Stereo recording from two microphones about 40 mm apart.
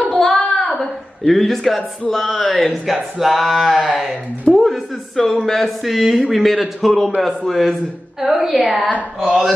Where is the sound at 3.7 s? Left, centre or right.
Right.